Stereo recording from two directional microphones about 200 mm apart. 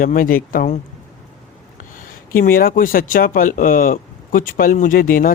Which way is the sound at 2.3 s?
45° left (ahead or behind).